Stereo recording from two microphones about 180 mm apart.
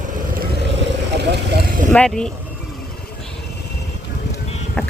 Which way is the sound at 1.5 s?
60° right (ahead or behind).